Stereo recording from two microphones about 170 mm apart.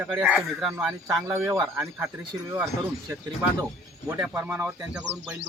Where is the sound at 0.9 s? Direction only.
15° right (ahead or behind).